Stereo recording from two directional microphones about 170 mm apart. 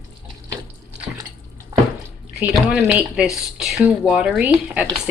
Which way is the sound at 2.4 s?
10° right (ahead or behind).